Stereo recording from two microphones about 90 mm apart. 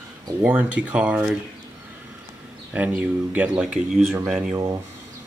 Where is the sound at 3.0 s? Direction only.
15° right (ahead or behind).